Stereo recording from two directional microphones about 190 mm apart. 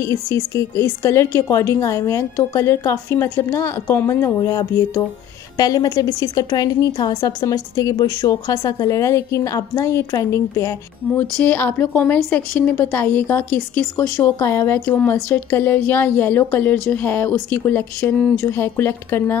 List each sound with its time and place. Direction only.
0.0 s speech: 15° left (ahead or behind)